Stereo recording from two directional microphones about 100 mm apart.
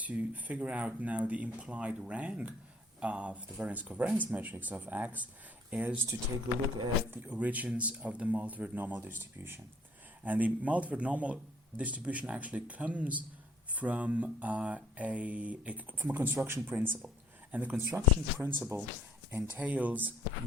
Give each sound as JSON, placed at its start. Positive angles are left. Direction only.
{"t": 0.0, "sound": "speech", "side_deg": -15}
{"t": 7.1, "sound": "speech", "side_deg": -15}
{"t": 19.4, "sound": "speech", "side_deg": -15}